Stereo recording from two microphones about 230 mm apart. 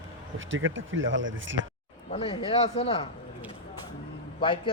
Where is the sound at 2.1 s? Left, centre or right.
Left.